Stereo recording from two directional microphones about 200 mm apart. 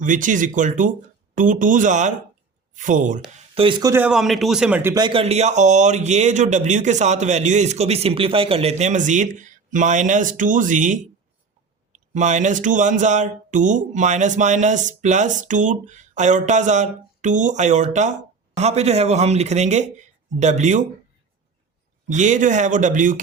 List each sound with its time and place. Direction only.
0.0 s speech: 40° right (ahead or behind)
3.3 s a man's voice: 30° right (ahead or behind); by 5.0 s 10° right (ahead or behind)
5.0 s speech: 30° right (ahead or behind)
22.1 s speech: 40° right (ahead or behind)